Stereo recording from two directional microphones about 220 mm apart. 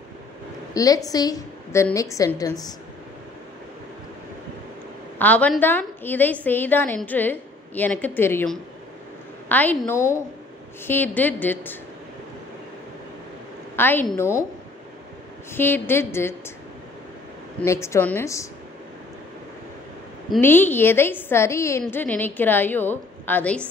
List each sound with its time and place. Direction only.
0.7 s a woman's voice: 15° left (ahead or behind)
5.2 s a woman's voice: 5° left (ahead or behind)
13.7 s a woman's voice: 10° left (ahead or behind)
15.5 s a woman's voice: 10° left (ahead or behind)
17.6 s a woman's voice: 10° left (ahead or behind)
20.3 s a woman's voice: 10° left (ahead or behind)